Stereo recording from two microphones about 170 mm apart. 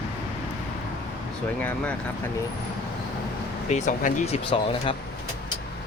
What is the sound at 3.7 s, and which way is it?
Speech, 45° left (ahead or behind).